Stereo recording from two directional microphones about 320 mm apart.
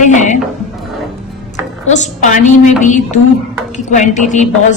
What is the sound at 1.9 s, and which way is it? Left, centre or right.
A woman's voice, left.